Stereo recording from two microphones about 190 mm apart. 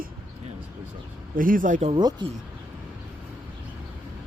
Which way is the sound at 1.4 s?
45° right (ahead or behind).